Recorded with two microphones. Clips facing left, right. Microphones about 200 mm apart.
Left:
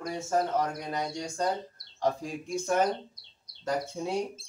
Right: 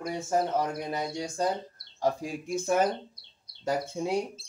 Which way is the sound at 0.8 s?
5° right (ahead or behind).